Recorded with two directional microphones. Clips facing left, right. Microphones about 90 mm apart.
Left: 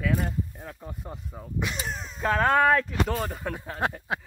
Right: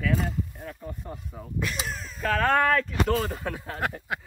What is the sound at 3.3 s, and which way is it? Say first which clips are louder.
Speech: right 1 dB; 5° left (ahead or behind).